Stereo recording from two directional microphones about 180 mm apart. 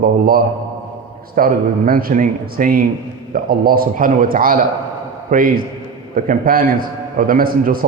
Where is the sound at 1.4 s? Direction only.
55° right (ahead or behind).